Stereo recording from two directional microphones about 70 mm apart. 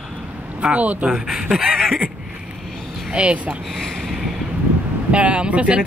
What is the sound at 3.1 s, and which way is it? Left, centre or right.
Speech, centre.